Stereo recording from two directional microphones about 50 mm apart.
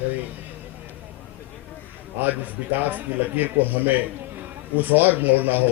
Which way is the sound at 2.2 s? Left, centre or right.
Right.